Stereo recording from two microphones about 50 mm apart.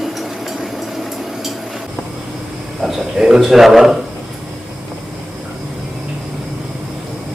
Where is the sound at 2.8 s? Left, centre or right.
Centre.